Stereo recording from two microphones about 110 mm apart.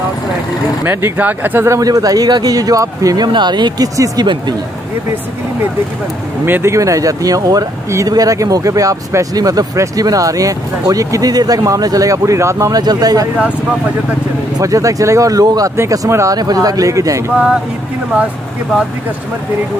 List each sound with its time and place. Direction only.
0.8 s speech: 15° right (ahead or behind); by 4.3 s 35° right (ahead or behind)
6.4 s speech: 20° right (ahead or behind)
14.6 s speech: 30° right (ahead or behind)